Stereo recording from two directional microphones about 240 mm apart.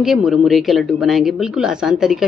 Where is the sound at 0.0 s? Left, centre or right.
Centre.